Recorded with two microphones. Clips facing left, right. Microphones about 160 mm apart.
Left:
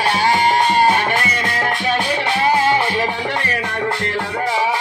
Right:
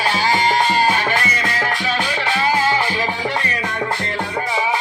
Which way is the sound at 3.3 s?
60° left (ahead or behind).